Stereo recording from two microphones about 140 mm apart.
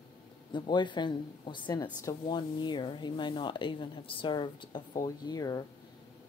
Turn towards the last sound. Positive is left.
turn(degrees=30)  # may be behind; listen again after turning